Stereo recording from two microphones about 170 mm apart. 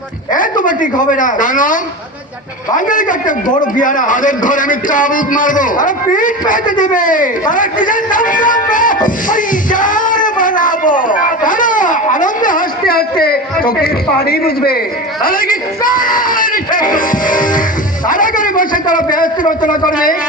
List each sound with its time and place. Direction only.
0.3 s a man's voice: 50° left (ahead or behind)